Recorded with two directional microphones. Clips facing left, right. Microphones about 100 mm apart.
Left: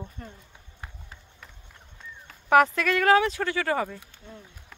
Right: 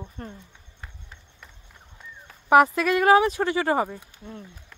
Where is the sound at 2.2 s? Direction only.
10° right (ahead or behind).